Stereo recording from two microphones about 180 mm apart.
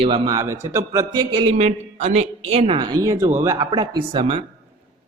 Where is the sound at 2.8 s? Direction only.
20° right (ahead or behind).